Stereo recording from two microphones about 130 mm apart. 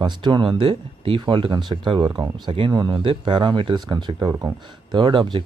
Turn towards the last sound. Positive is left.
turn(degrees=-40)  # may be behind; listen again after turning